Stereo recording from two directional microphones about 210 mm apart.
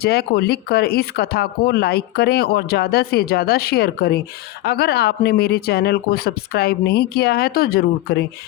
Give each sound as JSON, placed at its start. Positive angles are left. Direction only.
{"t": 0.0, "sound": "speech", "side_deg": 50}